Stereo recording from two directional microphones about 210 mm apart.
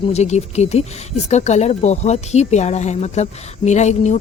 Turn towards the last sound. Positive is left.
turn(degrees=35)  # may be behind; listen again after turning